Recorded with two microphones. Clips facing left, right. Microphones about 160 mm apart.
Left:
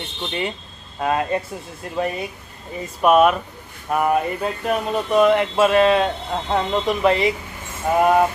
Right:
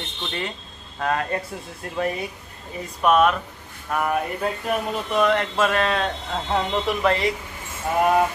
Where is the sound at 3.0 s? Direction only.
10° left (ahead or behind).